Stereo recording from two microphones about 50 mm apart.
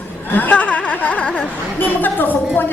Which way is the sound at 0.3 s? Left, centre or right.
Left.